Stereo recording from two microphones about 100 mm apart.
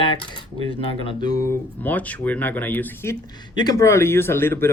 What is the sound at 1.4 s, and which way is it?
Speech, 20° left (ahead or behind).